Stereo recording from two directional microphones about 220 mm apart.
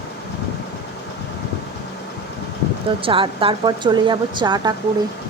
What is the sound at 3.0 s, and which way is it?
Speech, 25° right (ahead or behind).